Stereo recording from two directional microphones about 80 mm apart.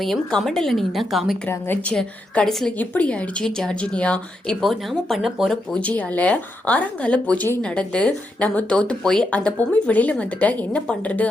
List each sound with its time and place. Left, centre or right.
0.0 s speech: centre
1.5 s a woman's voice: left
1.8 s a woman's voice: centre
2.7 s a woman's voice: centre
4.6 s speech: centre
5.7 s a woman's voice: centre